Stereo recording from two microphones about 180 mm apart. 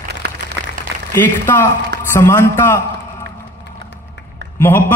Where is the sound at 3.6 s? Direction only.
70° left (ahead or behind).